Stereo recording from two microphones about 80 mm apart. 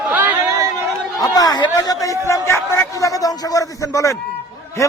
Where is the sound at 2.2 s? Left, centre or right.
Left.